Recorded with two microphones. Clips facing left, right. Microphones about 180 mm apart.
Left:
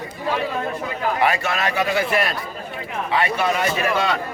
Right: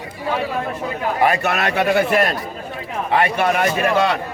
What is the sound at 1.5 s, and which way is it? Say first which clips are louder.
A man's voice: right 4 dB; 60° right (ahead or behind).